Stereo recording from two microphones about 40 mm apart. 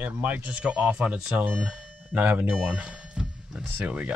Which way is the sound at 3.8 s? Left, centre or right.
Right.